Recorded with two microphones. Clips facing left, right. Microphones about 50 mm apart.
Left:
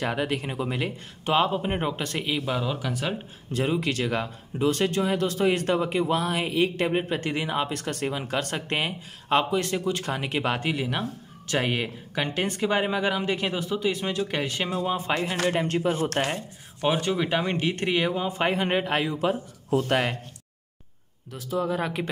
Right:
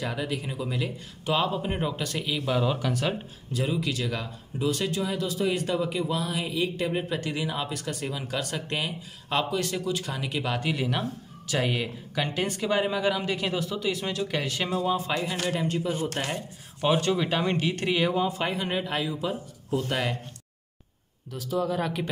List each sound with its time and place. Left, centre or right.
0.0 s speech: left
2.6 s speech: centre
2.9 s speech: centre
3.5 s speech: left
10.7 s speech: centre
11.4 s speech: left
15.5 s speech: left
16.8 s speech: centre
18.3 s speech: left
18.9 s a man's voice: left
19.8 s speech: left
21.3 s speech: left